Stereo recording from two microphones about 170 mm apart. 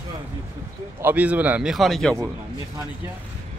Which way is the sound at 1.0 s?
10° right (ahead or behind).